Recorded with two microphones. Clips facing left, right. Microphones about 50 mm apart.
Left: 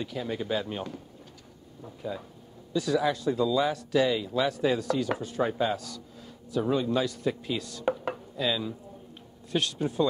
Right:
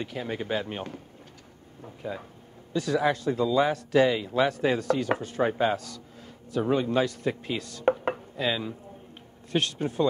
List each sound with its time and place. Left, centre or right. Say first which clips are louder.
0.0 s speech: even; right